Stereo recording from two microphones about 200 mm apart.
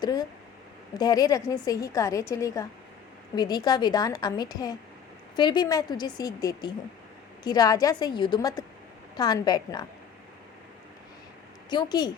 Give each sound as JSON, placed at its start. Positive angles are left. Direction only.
{"t": 0.0, "sound": "a woman's voice", "side_deg": 20}
{"t": 11.7, "sound": "a woman's voice", "side_deg": 20}